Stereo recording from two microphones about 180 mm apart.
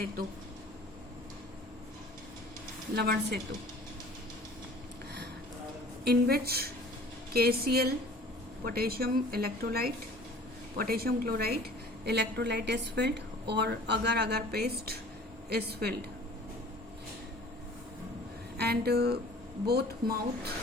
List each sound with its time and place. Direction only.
2.9 s a woman's voice: 60° right (ahead or behind)
6.1 s a woman's voice: 60° right (ahead or behind)
18.5 s a woman's voice: 60° right (ahead or behind)